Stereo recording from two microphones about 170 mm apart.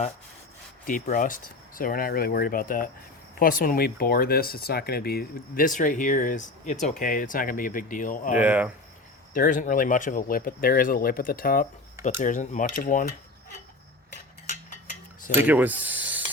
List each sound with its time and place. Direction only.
0.9 s speech: 50° left (ahead or behind)
8.3 s speech: 10° right (ahead or behind)
9.3 s speech: 50° left (ahead or behind)
12.0 s speech: 45° left (ahead or behind)
14.1 s tick-tock: 45° left (ahead or behind)
15.4 s speech: 10° right (ahead or behind)